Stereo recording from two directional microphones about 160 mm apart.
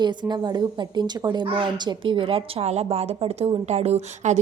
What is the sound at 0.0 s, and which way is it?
A woman's voice, 25° right (ahead or behind).